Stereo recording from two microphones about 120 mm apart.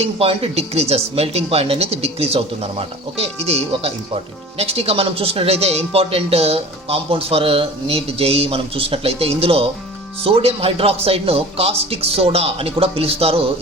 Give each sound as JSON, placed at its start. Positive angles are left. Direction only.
{"t": 0.0, "sound": "speech", "side_deg": -55}